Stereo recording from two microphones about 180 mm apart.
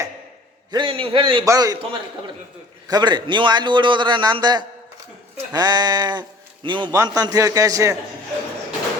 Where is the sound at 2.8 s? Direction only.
25° right (ahead or behind).